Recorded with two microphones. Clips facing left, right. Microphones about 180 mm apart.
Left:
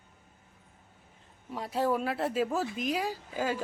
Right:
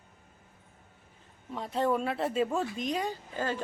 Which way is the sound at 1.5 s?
5° left (ahead or behind).